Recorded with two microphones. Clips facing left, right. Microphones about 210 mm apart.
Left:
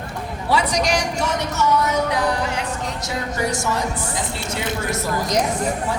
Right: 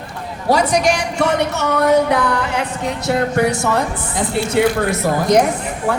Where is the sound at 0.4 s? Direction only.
45° right (ahead or behind).